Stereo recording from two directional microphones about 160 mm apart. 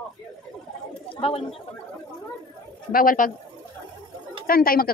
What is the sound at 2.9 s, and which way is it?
Speech, 60° left (ahead or behind).